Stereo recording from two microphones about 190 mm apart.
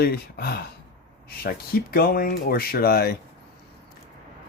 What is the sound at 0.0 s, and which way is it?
Speech, 55° left (ahead or behind).